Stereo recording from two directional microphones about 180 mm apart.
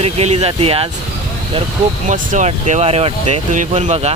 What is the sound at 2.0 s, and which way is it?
Speech, 45° right (ahead or behind).